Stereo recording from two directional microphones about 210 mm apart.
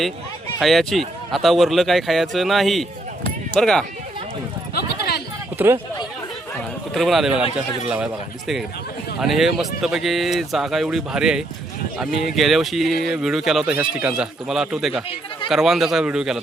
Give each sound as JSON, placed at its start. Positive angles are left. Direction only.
{"t": 0.6, "sound": "speech", "side_deg": 0}
{"t": 4.7, "sound": "a sound", "side_deg": 50}
{"t": 5.5, "sound": "speech", "side_deg": -10}
{"t": 6.9, "sound": "speech", "side_deg": 0}